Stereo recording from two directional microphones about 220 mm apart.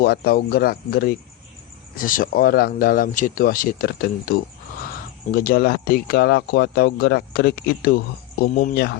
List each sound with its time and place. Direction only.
0.0 s speech: 45° left (ahead or behind)